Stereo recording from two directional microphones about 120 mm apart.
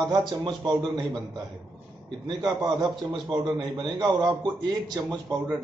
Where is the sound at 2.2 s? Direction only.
35° right (ahead or behind).